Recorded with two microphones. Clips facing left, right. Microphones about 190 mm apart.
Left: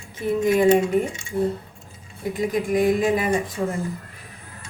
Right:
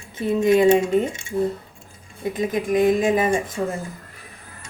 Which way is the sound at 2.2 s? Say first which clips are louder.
Even; 20° right (ahead or behind).